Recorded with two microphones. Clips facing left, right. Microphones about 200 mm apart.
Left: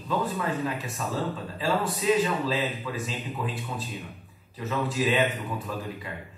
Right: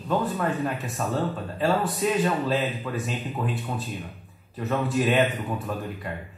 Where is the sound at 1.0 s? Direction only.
50° right (ahead or behind).